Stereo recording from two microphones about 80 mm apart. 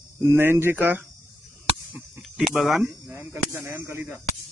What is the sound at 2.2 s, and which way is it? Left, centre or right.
Speech, centre.